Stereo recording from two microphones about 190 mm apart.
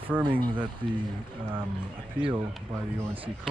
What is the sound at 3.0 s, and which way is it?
Speech, 15° right (ahead or behind).